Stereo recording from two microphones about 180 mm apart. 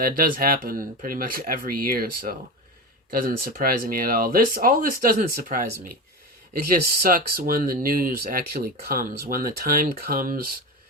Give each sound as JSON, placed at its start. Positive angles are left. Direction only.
{"t": 0.0, "sound": "speech", "side_deg": -50}